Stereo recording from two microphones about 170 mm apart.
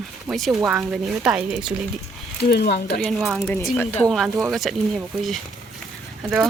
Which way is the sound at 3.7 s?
10° left (ahead or behind).